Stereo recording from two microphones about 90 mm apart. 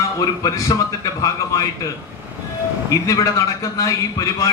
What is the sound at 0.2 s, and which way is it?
A man's voice, 40° left (ahead or behind).